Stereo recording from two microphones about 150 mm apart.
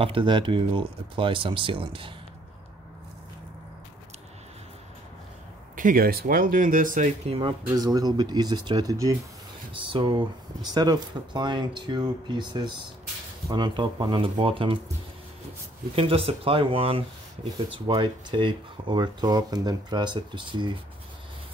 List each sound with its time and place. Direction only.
0.0 s speech: 35° right (ahead or behind)
5.8 s speech: 70° right (ahead or behind)
7.2 s speech: 35° right (ahead or behind)
9.8 s speech: 35° right (ahead or behind)
15.9 s speech: 40° right (ahead or behind)